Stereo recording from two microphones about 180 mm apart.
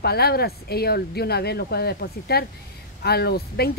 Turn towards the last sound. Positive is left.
turn(degrees=60)  # may be behind; listen again after turning